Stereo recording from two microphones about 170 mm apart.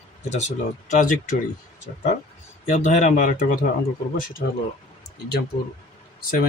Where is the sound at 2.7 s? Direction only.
45° left (ahead or behind).